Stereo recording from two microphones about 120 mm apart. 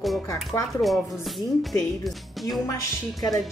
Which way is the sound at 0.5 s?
30° left (ahead or behind).